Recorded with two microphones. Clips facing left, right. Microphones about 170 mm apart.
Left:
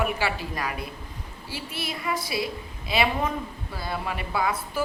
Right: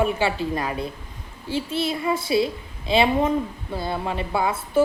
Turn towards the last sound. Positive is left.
turn(degrees=-25)  # may be behind; listen again after turning